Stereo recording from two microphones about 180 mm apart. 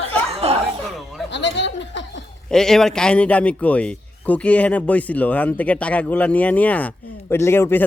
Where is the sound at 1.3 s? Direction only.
80° left.